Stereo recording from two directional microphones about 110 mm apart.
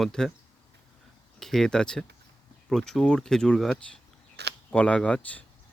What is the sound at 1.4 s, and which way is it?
Speech, 5° left (ahead or behind).